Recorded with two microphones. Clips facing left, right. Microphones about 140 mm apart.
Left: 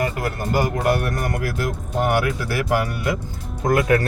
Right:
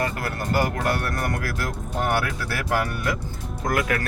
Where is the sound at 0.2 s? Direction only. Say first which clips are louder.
Left 2 dB; 15° left (ahead or behind).